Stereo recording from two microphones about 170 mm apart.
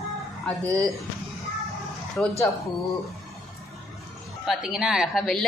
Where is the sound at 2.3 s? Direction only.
20° left (ahead or behind).